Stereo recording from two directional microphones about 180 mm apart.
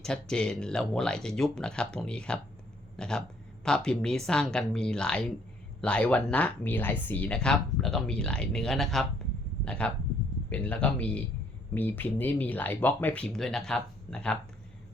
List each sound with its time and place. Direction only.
0.0 s speech: 5° left (ahead or behind)